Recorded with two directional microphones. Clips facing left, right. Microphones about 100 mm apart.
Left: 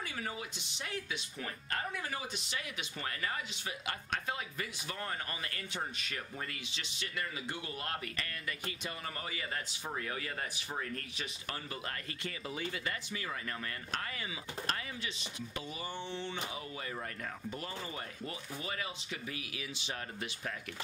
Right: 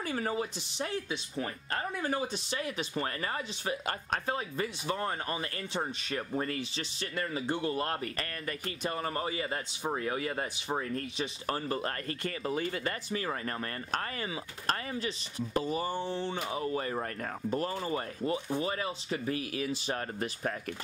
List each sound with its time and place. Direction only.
0.0 s speech: 40° right (ahead or behind)
18.3 s speech: 30° right (ahead or behind)